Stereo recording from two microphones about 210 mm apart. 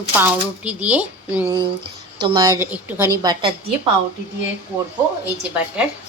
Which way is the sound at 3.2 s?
20° right (ahead or behind).